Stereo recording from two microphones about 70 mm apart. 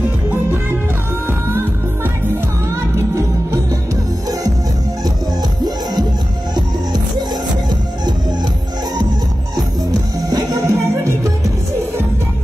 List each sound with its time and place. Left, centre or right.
6.5 s music: right
10.3 s music: right